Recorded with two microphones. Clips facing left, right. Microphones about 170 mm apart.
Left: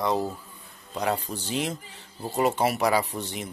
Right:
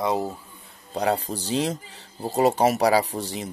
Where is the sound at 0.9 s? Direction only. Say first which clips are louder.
Right 4 dB; 35° right (ahead or behind).